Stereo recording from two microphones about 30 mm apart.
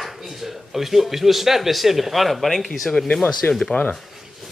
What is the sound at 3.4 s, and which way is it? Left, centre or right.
Speech, left.